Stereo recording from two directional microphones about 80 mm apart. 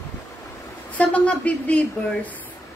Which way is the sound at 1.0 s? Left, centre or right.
Centre.